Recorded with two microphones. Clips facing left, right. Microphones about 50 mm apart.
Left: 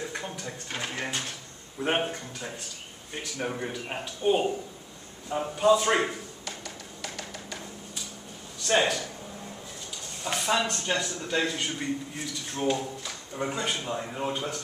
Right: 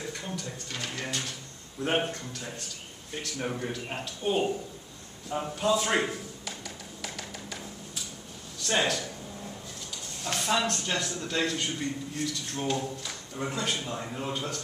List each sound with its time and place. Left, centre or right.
0.1 s a sound: left
1.8 s a man's voice: centre
3.1 s a man's voice: centre
7.0 s a sound: centre
8.6 s a man's voice: centre
10.2 s a man's voice: centre